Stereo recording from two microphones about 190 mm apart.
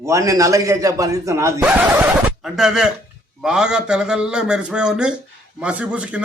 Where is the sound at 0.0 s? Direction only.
15° right (ahead or behind).